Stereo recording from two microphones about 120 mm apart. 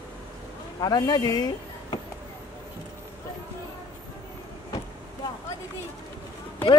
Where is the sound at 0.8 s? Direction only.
35° left (ahead or behind).